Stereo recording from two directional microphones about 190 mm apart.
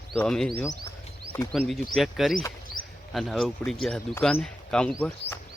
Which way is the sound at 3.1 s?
Centre (ahead or behind).